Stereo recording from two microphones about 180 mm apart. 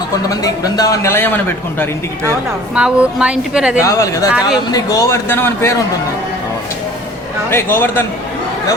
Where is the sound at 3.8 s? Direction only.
20° left (ahead or behind).